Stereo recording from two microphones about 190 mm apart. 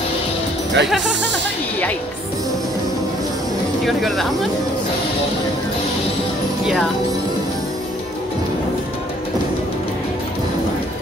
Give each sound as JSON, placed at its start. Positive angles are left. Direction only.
{"t": 0.8, "sound": "speech", "side_deg": -65}
{"t": 3.8, "sound": "speech", "side_deg": 0}
{"t": 6.6, "sound": "speech", "side_deg": 0}